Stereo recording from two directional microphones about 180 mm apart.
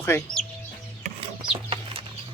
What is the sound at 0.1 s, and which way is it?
Speech, 15° left (ahead or behind).